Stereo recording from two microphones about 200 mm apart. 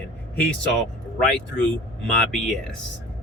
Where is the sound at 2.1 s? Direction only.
Centre (ahead or behind).